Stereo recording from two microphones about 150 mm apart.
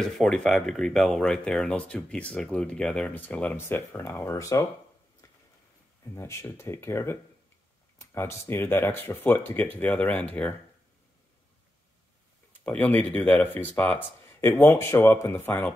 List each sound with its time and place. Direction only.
0.0 s speech: centre (ahead or behind); by 4.6 s 20° left (ahead or behind)
6.1 s speech: 20° left (ahead or behind)
12.6 s speech: 10° left (ahead or behind)